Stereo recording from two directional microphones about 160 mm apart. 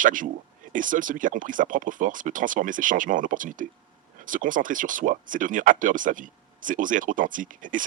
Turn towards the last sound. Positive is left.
turn(degrees=-55)  # may be behind; listen again after turning